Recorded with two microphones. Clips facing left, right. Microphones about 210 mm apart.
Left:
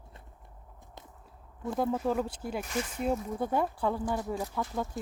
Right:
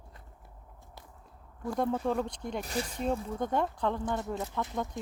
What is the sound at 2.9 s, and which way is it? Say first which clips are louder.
Speech: left 2 dB; 5° left (ahead or behind).